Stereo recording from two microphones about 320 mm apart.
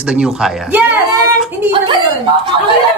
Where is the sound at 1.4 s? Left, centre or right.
Centre.